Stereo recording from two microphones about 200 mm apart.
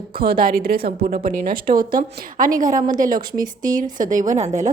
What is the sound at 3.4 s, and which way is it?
Speech, 20° right (ahead or behind).